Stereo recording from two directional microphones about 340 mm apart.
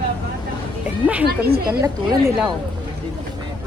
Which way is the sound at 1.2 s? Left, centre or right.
Right.